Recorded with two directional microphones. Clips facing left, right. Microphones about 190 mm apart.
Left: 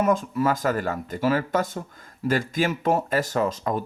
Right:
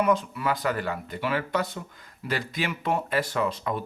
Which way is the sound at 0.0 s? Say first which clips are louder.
Left 3 dB; 45° left (ahead or behind).